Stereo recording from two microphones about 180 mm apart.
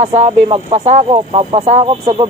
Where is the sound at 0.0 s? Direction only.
35° right (ahead or behind).